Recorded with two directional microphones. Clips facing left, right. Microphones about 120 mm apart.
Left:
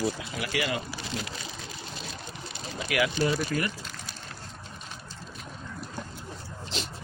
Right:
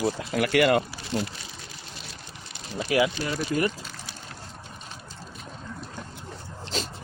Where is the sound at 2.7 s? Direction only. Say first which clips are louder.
Right 4 dB; 30° right (ahead or behind).